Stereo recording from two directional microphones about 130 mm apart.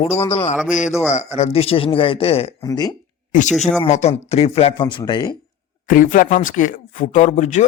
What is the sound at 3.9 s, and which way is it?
Speech, 55° left (ahead or behind).